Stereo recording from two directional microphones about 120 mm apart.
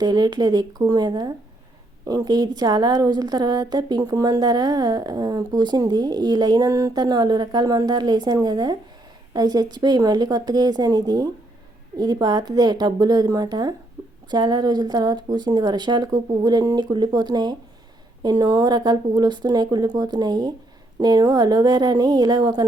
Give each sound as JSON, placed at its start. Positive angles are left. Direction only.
{"t": 0.0, "sound": "a woman's voice", "side_deg": -35}